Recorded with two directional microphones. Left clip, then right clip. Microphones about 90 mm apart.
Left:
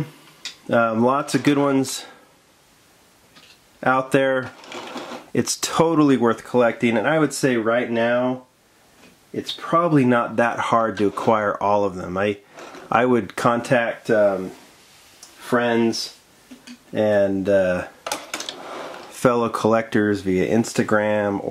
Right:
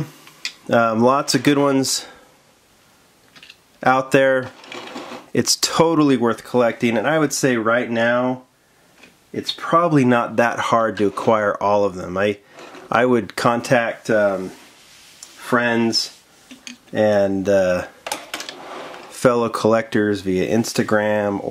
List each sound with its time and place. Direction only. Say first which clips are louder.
0.7 s speech: right 3 dB; 35° right (ahead or behind)
3.8 s speech: right 3 dB; 25° right (ahead or behind)
4.4 s sewing machine: right 2 dB; 5° right (ahead or behind)
5.3 s speech: right 4 dB; 15° right (ahead or behind)
6.5 s speech: right 2 dB; 25° right (ahead or behind)
7.5 s speech: right 2 dB; 45° right (ahead or behind); by 12.4 s 15° right (ahead or behind)
12.5 s a sound: even; centre (ahead or behind)
12.9 s speech: right 1 dB; 15° right (ahead or behind)
13.7 s speech: right 1 dB; 35° right (ahead or behind)
15.4 s speech: right 1 dB; 45° right (ahead or behind); by 17.8 s 25° right (ahead or behind)
18.0 s a sound: even; centre (ahead or behind)
19.0 s speech: right 2 dB; 10° right (ahead or behind); by 21.5 s 25° right (ahead or behind)